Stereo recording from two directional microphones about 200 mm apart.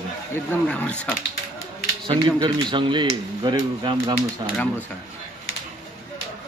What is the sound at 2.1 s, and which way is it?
Speech, 20° right (ahead or behind).